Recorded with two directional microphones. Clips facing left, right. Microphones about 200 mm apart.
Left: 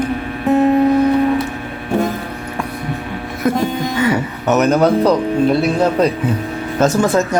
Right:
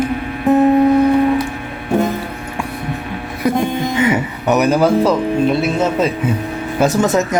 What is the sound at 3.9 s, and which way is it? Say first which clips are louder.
Speech: right 1 dB; 20° right (ahead or behind).